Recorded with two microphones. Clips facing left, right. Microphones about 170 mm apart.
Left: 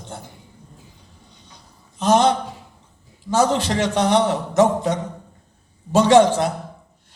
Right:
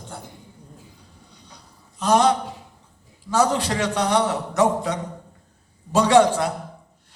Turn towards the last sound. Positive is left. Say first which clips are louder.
# left 3 dB
turn(degrees=25)  # may be behind; listen again after turning